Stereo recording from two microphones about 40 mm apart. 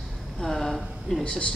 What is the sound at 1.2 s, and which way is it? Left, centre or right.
Speech, left.